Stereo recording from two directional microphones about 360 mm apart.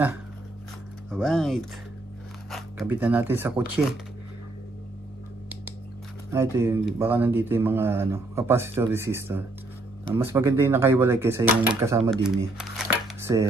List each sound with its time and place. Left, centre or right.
1.1 s speech: centre
6.3 s speech: centre